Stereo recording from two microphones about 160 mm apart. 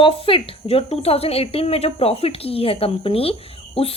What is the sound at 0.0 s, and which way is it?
Speech, 35° left (ahead or behind).